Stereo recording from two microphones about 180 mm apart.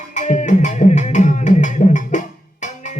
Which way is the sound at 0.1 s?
40° left (ahead or behind).